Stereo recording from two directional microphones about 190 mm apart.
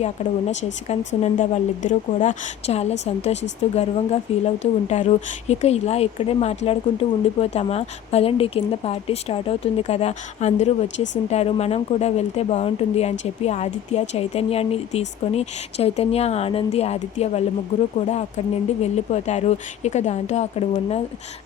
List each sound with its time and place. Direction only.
0.0 s speech: 35° left (ahead or behind)
10.8 s speech: 70° left (ahead or behind)
11.3 s speech: 35° left (ahead or behind)
18.8 s speech: 35° left (ahead or behind)